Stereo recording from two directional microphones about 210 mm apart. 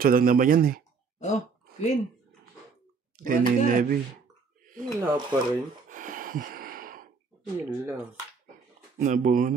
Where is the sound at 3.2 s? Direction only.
45° right (ahead or behind).